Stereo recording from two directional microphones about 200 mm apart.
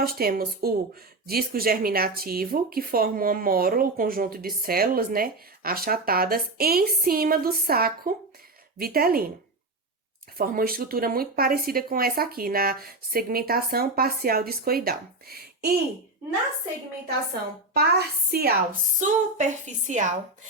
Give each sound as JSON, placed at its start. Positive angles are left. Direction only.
{"t": 0.0, "sound": "speech", "side_deg": -50}
{"t": 10.3, "sound": "speech", "side_deg": -45}
{"t": 17.7, "sound": "speech", "side_deg": -50}
{"t": 18.9, "sound": "a woman's voice", "side_deg": -40}